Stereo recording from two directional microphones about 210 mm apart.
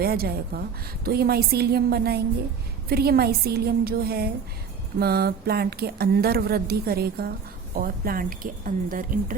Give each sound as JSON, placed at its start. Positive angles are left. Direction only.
{"t": 0.0, "sound": "speech", "side_deg": -45}